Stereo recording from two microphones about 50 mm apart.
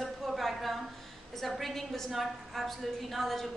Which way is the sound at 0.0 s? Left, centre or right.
Centre.